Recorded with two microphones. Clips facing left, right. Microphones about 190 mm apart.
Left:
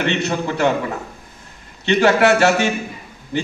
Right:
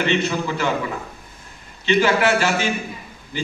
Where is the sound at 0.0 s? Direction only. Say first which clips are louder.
Left 1 dB; 60° left (ahead or behind).